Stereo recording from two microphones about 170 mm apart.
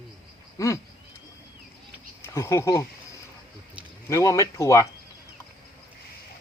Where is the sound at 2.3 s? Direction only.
15° left (ahead or behind).